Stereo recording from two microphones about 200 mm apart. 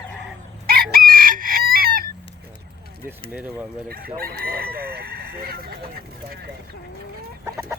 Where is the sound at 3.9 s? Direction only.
50° right (ahead or behind).